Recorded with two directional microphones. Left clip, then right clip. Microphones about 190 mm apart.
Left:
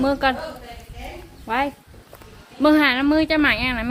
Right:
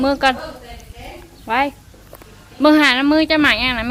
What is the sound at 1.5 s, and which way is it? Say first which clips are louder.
Speech: right 5 dB; 5° right (ahead or behind).